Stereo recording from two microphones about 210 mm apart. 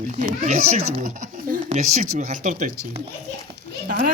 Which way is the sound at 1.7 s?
35° right (ahead or behind).